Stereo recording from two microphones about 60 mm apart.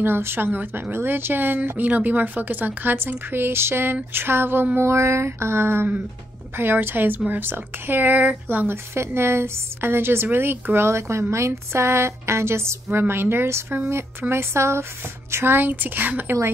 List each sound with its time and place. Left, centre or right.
0.0 s speech: right
8.9 s a woman's voice: right